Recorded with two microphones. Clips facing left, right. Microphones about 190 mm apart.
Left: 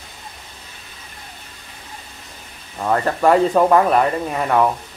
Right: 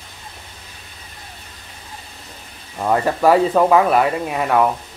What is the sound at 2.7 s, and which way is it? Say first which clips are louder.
Speech: right 1 dB; 10° right (ahead or behind).